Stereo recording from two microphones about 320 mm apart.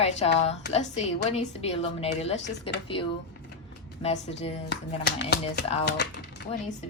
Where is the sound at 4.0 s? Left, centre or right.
Centre.